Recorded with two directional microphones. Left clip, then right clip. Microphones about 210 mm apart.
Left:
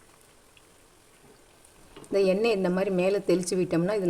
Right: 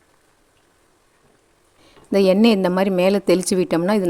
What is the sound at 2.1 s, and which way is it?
A woman's voice, 45° right (ahead or behind).